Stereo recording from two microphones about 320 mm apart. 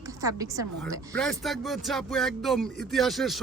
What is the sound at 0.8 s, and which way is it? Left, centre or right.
A woman's voice, centre.